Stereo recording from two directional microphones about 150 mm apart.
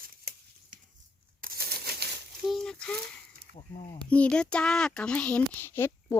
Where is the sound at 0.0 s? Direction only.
75° right (ahead or behind).